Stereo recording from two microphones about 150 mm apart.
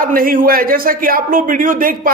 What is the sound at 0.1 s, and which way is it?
Speech, 75° right (ahead or behind).